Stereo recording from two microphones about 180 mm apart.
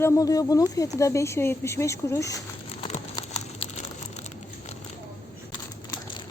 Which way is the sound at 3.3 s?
35° left (ahead or behind).